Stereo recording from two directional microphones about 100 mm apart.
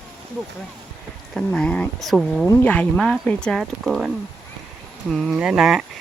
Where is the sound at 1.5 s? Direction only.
10° left (ahead or behind).